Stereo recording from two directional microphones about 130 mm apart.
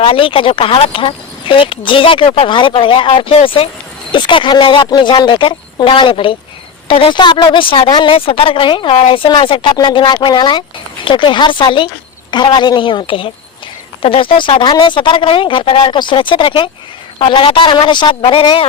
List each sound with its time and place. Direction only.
0.0 s a woman's voice: 40° left (ahead or behind)